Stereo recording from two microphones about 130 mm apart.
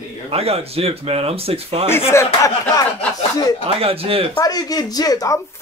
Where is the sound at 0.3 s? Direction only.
50° right (ahead or behind).